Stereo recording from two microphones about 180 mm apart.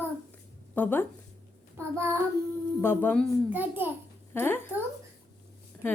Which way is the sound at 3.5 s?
10° right (ahead or behind).